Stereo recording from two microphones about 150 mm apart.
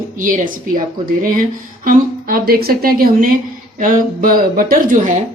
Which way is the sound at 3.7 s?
65° right (ahead or behind).